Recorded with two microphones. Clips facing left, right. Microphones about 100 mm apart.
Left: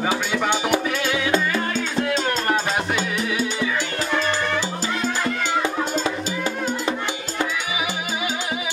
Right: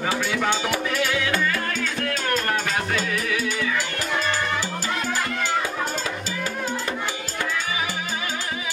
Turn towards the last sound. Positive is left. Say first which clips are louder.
# left 3 dB
turn(degrees=20)  # may be behind; listen again after turning